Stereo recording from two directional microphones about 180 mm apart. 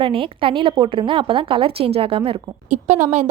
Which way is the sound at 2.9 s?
10° right (ahead or behind).